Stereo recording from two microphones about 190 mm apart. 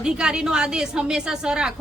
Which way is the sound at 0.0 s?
5° right (ahead or behind).